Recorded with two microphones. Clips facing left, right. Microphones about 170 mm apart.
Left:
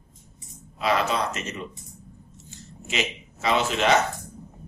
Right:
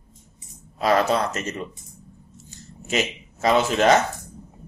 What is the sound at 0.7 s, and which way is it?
Speech, 40° right (ahead or behind).